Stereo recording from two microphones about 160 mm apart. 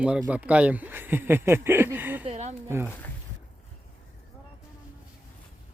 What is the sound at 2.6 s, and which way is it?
Speech, 15° right (ahead or behind).